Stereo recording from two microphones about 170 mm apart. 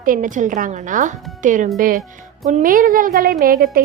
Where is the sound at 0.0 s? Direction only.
55° right (ahead or behind).